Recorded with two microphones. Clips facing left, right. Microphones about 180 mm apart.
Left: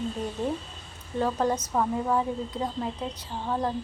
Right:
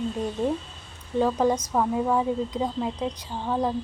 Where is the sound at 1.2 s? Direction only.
10° right (ahead or behind).